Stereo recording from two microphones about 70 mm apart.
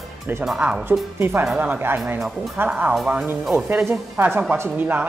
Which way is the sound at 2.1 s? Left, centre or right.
Centre.